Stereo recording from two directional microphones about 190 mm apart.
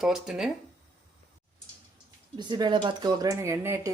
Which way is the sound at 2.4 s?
20° right (ahead or behind).